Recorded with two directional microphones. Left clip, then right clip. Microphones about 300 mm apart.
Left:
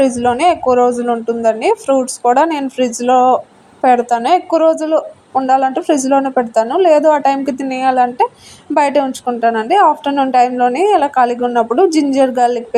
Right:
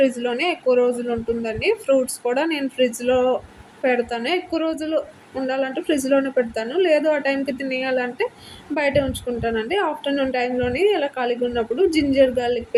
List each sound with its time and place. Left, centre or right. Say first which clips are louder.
0.2 s a woman's voice: left 10 dB; centre